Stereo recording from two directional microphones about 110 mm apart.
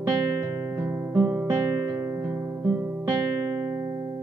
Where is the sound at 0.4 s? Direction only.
25° right (ahead or behind).